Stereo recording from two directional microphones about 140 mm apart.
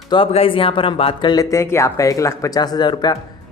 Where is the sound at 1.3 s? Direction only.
25° left (ahead or behind).